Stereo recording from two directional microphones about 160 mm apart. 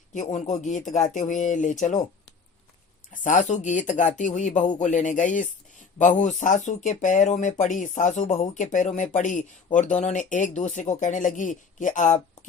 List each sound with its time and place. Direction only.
0.1 s speech: 50° left (ahead or behind)
3.1 s speech: 55° left (ahead or behind)